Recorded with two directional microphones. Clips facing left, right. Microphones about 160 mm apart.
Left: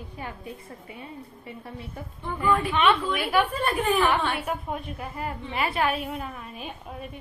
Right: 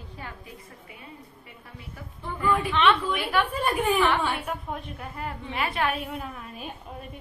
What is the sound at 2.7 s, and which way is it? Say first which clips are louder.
Speech: even; 10° left (ahead or behind).